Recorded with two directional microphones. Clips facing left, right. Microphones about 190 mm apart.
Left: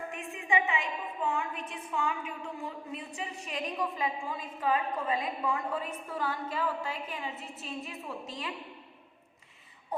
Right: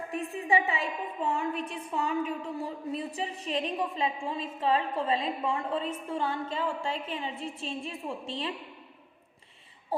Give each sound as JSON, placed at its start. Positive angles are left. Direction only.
{"t": 0.1, "sound": "a woman's voice", "side_deg": -35}